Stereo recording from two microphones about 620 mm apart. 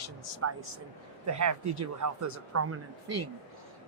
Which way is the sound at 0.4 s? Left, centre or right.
Right.